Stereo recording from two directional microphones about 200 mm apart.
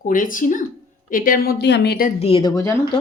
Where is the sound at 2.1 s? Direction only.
30° left (ahead or behind).